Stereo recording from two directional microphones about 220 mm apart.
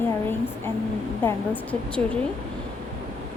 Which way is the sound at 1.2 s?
10° left (ahead or behind).